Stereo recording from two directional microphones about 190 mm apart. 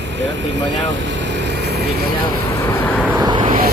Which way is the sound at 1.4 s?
60° right (ahead or behind).